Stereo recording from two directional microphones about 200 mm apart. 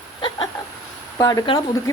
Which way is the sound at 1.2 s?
20° left (ahead or behind).